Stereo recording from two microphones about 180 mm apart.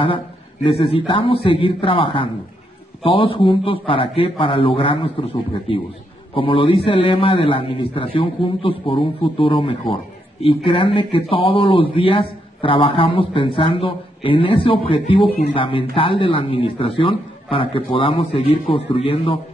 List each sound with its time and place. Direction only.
0.7 s a man's voice: 30° left (ahead or behind)